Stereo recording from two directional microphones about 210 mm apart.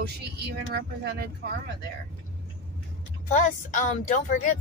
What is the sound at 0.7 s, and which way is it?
Speech, 50° right (ahead or behind).